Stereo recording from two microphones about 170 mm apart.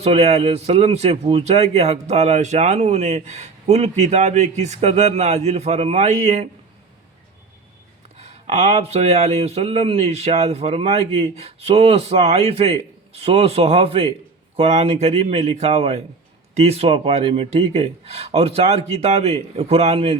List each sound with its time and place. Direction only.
0.0 s a man's voice: 40° right (ahead or behind)
8.2 s a man's voice: 40° right (ahead or behind)